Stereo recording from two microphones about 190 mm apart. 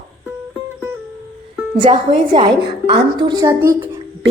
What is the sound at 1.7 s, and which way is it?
A woman's voice, 25° right (ahead or behind).